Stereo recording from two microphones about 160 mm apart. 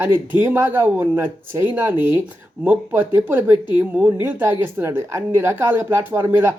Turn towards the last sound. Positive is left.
turn(degrees=-15)  # may be behind; listen again after turning